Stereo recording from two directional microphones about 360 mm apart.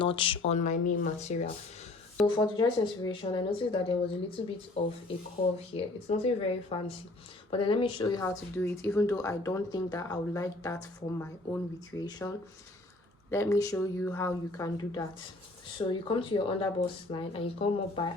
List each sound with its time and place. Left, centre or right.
0.0 s speech: centre
13.3 s speech: centre